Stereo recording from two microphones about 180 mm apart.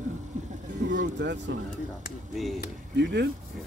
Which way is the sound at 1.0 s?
75° right (ahead or behind).